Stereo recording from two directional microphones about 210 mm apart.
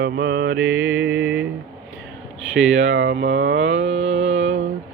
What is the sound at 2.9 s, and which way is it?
Mantra, 60° right (ahead or behind).